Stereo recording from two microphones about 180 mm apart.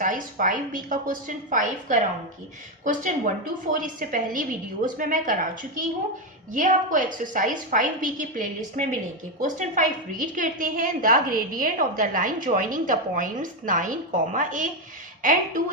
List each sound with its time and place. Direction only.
0.0 s a woman's voice: 45° right (ahead or behind)